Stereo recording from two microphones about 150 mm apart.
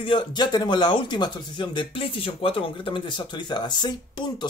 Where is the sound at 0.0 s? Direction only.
30° left (ahead or behind).